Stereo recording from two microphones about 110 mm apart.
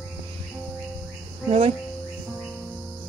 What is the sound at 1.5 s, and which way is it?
Speech, 60° right (ahead or behind).